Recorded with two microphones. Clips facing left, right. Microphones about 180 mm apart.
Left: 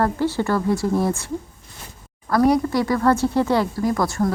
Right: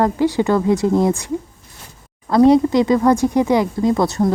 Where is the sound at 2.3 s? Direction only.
20° right (ahead or behind).